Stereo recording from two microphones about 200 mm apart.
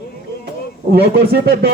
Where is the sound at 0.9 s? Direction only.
50° right (ahead or behind).